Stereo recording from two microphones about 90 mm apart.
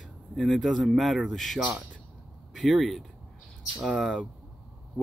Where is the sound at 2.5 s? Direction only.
Centre (ahead or behind).